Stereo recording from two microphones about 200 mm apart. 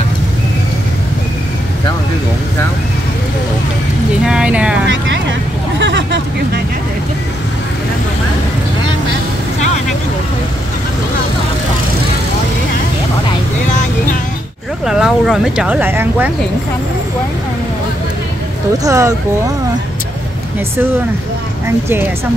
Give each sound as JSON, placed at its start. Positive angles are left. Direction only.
{"t": 4.3, "sound": "a sound", "side_deg": -5}
{"t": 4.8, "sound": "vehicle", "side_deg": -70}
{"t": 5.8, "sound": "hubbub", "side_deg": -60}
{"t": 14.9, "sound": "speech", "side_deg": -5}
{"t": 18.9, "sound": "speech", "side_deg": -15}